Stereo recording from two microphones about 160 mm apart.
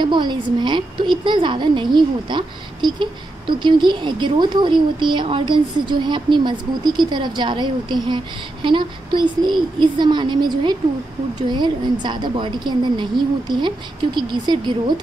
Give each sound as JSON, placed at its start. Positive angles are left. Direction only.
{"t": 0.0, "sound": "a woman's voice", "side_deg": -30}